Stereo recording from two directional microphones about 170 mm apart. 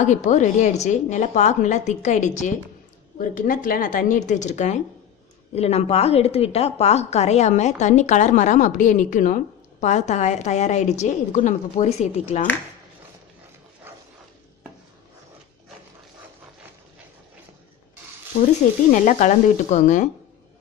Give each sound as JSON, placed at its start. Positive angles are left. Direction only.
{"t": 0.0, "sound": "a woman's voice", "side_deg": 45}
{"t": 18.9, "sound": "a woman's voice", "side_deg": 45}